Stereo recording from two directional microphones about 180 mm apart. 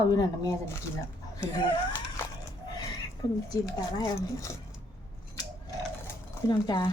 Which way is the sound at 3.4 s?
20° left (ahead or behind).